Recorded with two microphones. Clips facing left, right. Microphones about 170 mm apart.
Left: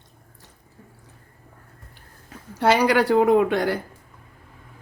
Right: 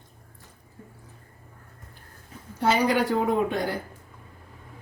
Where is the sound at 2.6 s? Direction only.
75° left (ahead or behind).